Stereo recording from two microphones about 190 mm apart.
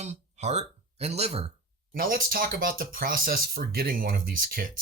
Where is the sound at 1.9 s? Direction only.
50° right (ahead or behind).